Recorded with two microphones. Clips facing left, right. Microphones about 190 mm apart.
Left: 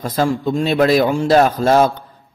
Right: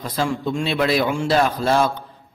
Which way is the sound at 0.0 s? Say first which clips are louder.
Left 5 dB; 45° left (ahead or behind).